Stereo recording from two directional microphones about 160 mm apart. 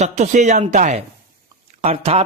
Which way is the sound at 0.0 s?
45° right (ahead or behind).